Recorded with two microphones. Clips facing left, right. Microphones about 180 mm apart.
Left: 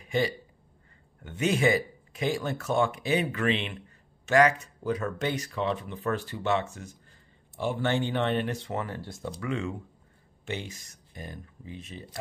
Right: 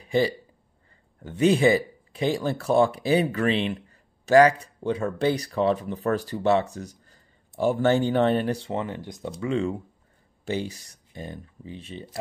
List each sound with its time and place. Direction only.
0.0 s a sound: 35° right (ahead or behind)
1.2 s speech: 35° right (ahead or behind); by 9.5 s 15° right (ahead or behind)
9.5 s speech: 30° right (ahead or behind)